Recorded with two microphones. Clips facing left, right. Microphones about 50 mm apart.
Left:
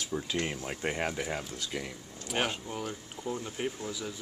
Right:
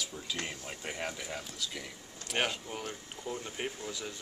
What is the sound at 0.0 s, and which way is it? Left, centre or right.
Speech, left.